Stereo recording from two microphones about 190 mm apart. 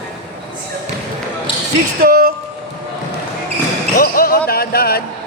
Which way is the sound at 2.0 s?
50° right (ahead or behind).